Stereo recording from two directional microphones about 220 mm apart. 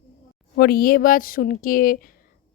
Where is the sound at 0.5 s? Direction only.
45° left (ahead or behind).